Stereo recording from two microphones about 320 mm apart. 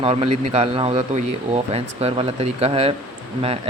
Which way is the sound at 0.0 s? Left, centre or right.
Centre.